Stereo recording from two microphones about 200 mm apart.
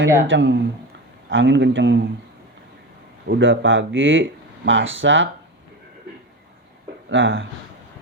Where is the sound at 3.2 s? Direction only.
60° right (ahead or behind).